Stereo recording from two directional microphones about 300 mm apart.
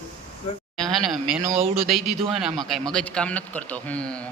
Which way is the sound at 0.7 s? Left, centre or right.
Centre.